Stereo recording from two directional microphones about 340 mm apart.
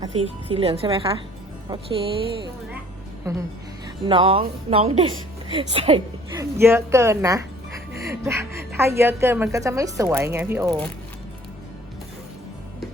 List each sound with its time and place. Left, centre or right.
0.0 s speech: centre